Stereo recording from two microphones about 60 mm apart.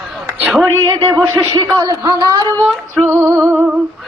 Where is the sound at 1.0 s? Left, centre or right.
Right.